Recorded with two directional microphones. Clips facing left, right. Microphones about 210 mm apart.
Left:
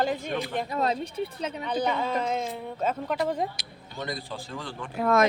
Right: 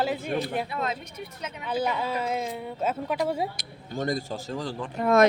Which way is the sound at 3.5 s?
45° right (ahead or behind).